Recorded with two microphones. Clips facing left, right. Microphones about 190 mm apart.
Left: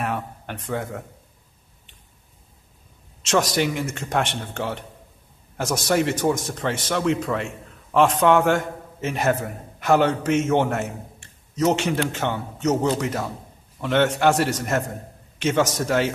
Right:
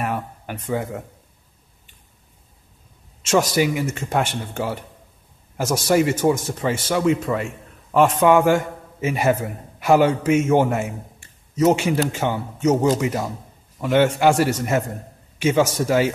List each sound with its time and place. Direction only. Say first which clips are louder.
0.0 s speech: right 2 dB; centre (ahead or behind)
3.2 s speech: right 3 dB; 5° right (ahead or behind)